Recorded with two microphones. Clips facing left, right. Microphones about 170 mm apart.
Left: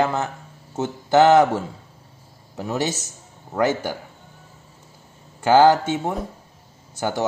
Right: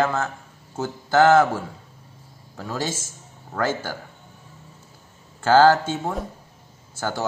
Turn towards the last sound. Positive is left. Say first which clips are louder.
# left 3 dB
turn(degrees=15)  # may be behind; listen again after turning